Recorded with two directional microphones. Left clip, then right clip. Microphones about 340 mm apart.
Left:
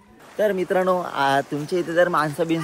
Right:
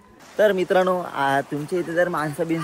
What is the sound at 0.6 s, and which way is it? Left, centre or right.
Speech, centre.